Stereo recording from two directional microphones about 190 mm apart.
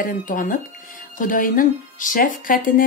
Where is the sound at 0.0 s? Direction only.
45° left (ahead or behind).